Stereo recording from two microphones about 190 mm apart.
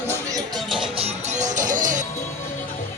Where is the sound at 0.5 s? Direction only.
Centre (ahead or behind).